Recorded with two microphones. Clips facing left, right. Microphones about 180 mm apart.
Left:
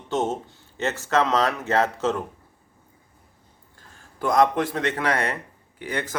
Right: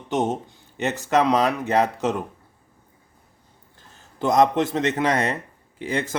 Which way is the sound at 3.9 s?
20° right (ahead or behind).